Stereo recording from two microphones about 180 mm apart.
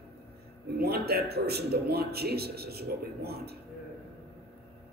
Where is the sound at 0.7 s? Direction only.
60° right (ahead or behind).